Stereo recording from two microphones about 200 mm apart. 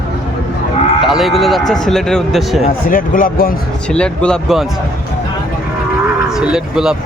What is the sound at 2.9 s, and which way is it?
Speech, 45° left (ahead or behind).